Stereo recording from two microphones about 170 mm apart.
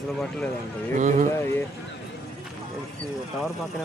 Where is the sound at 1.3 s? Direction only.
15° left (ahead or behind).